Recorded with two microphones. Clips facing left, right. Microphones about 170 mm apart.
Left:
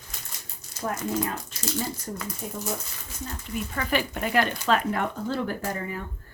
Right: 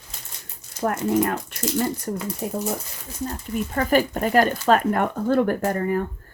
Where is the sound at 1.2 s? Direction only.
60° right (ahead or behind).